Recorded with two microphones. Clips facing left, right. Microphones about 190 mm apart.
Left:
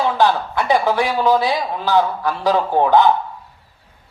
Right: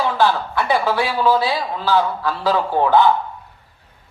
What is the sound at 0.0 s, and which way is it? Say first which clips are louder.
Speech: left 1 dB; 15° left (ahead or behind).